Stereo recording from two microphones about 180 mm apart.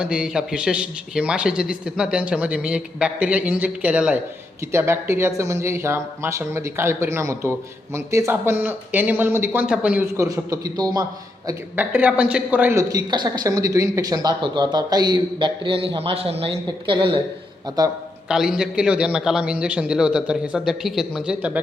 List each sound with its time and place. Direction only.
0.0 s a man's voice: 5° right (ahead or behind); by 11.0 s 20° right (ahead or behind)
11.4 s a woman's voice: 10° right (ahead or behind)
18.3 s a man's voice: 5° right (ahead or behind)